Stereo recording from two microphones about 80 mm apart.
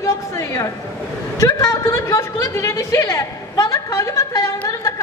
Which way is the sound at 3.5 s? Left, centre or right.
Left.